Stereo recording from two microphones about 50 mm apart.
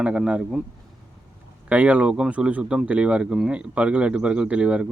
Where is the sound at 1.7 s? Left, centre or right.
Right.